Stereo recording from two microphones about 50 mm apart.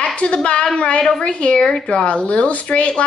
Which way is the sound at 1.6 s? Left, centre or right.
Centre.